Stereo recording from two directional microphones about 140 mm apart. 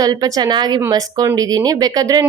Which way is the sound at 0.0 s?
25° right (ahead or behind).